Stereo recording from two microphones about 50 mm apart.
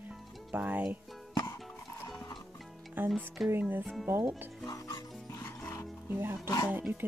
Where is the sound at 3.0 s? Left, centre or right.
Right.